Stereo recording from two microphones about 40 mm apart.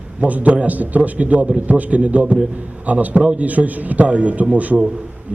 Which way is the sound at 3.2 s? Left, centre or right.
Right.